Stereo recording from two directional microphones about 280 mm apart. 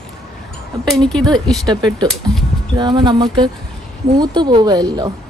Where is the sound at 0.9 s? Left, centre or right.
Centre.